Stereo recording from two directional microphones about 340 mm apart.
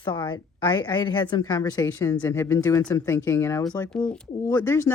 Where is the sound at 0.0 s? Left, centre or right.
Centre.